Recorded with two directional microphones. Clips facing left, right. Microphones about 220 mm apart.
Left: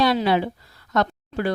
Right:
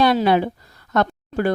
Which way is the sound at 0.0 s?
50° right (ahead or behind).